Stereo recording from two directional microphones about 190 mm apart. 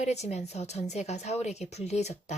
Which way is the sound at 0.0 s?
35° left (ahead or behind).